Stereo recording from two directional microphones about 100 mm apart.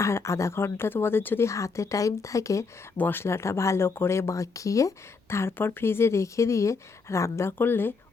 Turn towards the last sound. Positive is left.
turn(degrees=20)  # may be behind; listen again after turning